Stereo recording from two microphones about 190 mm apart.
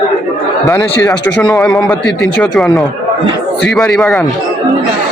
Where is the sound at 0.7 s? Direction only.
10° left (ahead or behind).